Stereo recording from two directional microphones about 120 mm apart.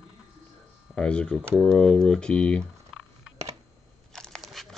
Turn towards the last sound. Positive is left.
turn(degrees=0)  # may be behind; listen again after turning